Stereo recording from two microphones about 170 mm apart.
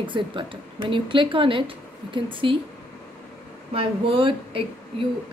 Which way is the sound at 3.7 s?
30° right (ahead or behind).